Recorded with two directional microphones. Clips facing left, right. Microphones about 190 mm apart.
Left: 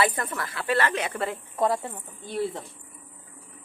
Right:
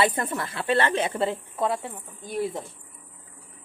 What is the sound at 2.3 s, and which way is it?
Speech, 15° right (ahead or behind).